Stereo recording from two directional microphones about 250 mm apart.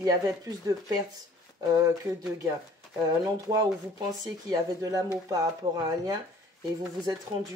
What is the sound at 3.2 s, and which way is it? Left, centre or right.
Speech, centre.